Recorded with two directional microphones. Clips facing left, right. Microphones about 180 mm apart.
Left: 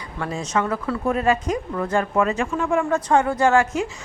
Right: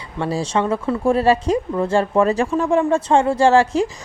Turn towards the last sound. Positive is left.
turn(degrees=-35)  # may be behind; listen again after turning